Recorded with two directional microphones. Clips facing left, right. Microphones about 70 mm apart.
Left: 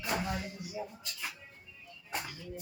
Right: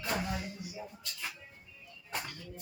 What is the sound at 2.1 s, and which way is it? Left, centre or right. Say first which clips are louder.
Speech: left 1 dB; centre.